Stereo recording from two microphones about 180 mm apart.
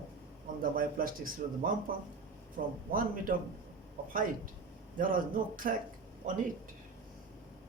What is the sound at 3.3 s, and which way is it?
Speech, 50° right (ahead or behind).